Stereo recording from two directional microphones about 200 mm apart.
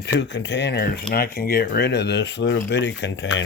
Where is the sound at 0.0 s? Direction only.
60° left (ahead or behind).